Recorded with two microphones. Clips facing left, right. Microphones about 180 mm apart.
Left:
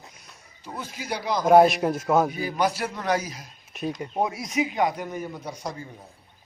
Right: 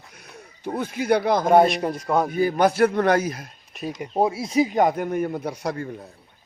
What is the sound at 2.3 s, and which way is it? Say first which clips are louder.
Speech: right 7 dB; 55° right (ahead or behind).